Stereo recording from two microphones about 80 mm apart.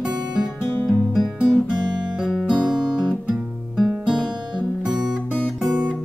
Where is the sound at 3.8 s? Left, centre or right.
Centre.